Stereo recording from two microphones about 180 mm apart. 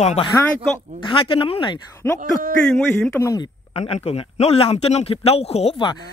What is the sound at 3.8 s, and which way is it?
A man's voice, 35° left (ahead or behind).